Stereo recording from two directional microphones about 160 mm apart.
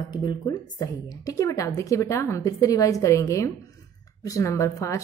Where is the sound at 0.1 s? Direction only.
25° left (ahead or behind).